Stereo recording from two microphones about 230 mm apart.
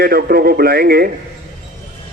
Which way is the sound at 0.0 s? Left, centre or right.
Right.